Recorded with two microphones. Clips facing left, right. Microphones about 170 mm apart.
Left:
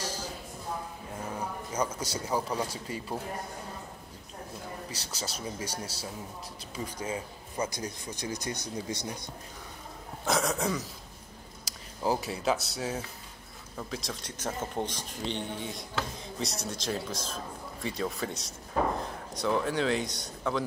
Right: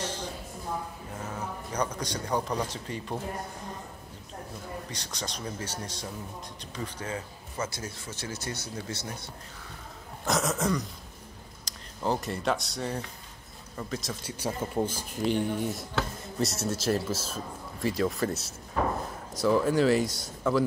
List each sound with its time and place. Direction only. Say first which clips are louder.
0.0 s a sound: right 2 dB; 10° left (ahead or behind)
1.7 s speech: right 1 dB; 5° left (ahead or behind)
4.9 s speech: right 1 dB; 5° left (ahead or behind)
10.2 s speech: right 1 dB; centre (ahead or behind)